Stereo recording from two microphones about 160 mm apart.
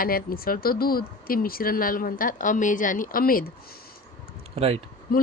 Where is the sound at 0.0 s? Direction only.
65° left (ahead or behind).